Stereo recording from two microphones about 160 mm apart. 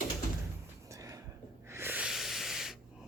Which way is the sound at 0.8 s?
20° right (ahead or behind).